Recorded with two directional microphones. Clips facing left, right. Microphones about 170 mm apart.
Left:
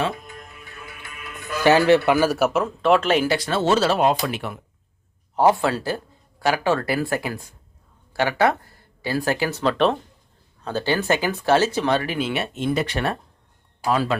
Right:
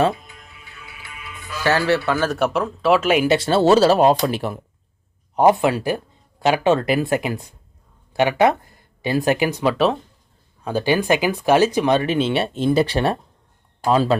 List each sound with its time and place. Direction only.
0.3 s music: 50° left (ahead or behind)
1.6 s a man's voice: 15° left (ahead or behind); by 3.3 s 10° right (ahead or behind)
3.3 s speech: 30° right (ahead or behind)
5.4 s speech: 15° right (ahead or behind)